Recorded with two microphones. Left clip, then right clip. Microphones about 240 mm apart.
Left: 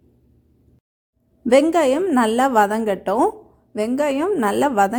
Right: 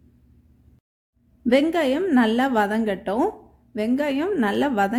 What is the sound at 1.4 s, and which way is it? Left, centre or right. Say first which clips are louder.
A woman's voice: left 5 dB; centre.